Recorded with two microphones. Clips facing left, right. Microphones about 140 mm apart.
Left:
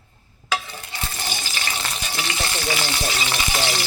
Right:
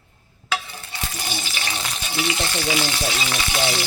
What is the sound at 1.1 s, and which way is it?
Frying, 5° right (ahead or behind).